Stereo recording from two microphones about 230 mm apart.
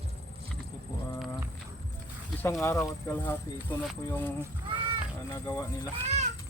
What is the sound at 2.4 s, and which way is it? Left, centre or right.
Speech, centre.